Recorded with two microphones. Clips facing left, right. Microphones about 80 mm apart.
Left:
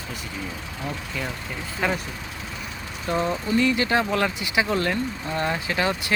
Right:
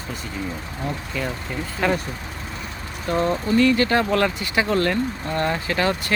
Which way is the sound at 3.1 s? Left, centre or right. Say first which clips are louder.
Right 3 dB; centre.